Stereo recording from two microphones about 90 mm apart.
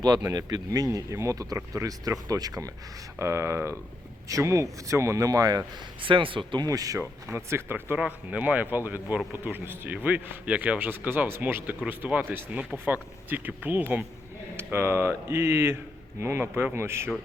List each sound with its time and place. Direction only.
0.0 s a man's voice: 50° right (ahead or behind)
6.0 s speech: 70° right (ahead or behind)
6.7 s a man's voice: 40° right (ahead or behind)
7.0 s speech: 30° right (ahead or behind)
7.9 s speech: 15° right (ahead or behind)